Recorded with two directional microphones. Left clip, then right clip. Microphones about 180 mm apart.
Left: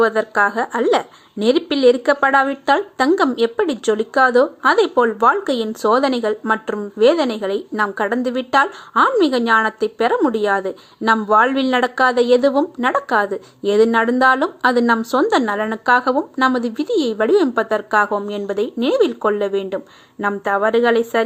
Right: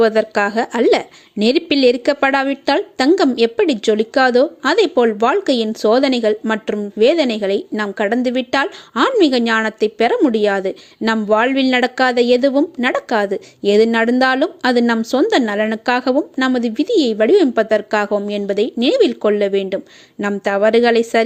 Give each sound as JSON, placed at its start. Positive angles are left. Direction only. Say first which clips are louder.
{"t": 0.0, "sound": "a woman's voice", "louder": "right 1 dB", "side_deg": -40}